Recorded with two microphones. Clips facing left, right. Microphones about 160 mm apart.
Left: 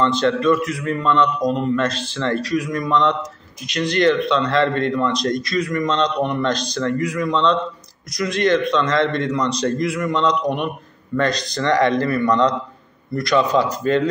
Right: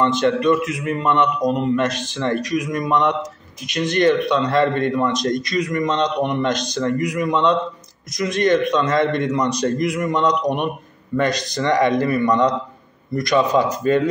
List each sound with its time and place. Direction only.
0.0 s a man's voice: 20° right (ahead or behind)